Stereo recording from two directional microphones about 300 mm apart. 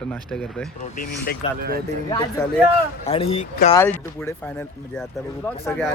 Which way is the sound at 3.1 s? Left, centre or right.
Centre.